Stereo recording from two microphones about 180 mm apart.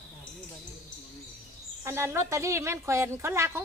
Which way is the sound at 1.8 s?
15° right (ahead or behind).